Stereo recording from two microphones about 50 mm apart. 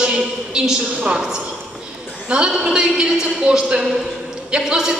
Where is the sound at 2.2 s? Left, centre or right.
Centre.